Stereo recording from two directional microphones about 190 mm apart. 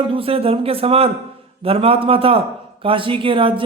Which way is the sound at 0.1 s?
30° right (ahead or behind).